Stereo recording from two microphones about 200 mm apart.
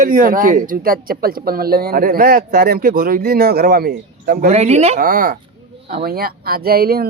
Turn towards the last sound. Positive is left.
turn(degrees=-50)  # may be behind; listen again after turning